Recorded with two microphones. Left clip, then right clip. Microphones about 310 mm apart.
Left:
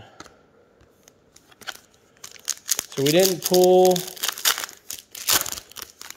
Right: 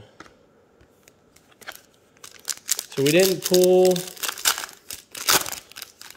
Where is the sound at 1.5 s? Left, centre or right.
Left.